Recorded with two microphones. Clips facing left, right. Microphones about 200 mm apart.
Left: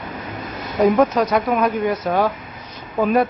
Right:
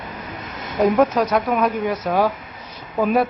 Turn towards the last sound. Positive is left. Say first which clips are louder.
# left 1 dB
turn(degrees=0)  # may be behind; listen again after turning